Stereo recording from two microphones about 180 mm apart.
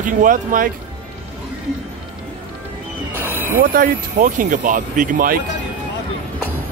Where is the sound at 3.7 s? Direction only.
50° right (ahead or behind).